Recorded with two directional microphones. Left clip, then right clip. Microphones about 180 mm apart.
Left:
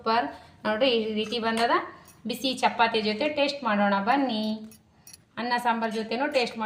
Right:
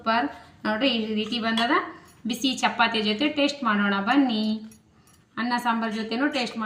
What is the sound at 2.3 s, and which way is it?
A woman's voice, 55° left (ahead or behind).